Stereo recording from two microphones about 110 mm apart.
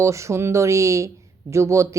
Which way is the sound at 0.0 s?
25° right (ahead or behind).